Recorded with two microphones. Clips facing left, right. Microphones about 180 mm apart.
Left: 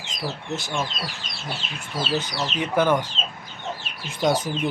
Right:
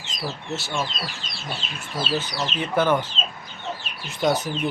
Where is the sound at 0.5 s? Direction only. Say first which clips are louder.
Even; 15° left (ahead or behind).